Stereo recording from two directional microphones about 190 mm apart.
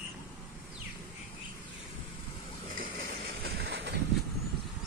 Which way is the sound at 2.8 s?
55° right (ahead or behind).